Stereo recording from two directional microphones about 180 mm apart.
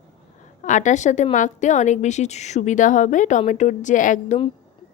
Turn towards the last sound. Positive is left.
turn(degrees=45)  # may be behind; listen again after turning